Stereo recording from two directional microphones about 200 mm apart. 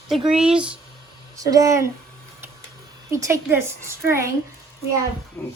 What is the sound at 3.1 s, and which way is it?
A woman's voice, 15° right (ahead or behind).